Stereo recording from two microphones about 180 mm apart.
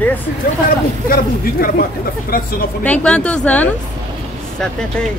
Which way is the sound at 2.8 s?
5° left (ahead or behind).